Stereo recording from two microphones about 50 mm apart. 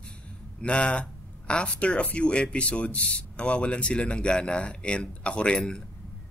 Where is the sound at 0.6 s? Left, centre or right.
Left.